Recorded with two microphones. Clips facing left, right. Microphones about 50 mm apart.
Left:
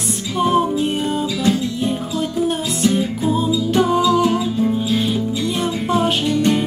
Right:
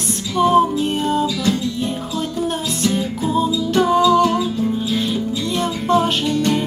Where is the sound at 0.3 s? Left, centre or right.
Centre.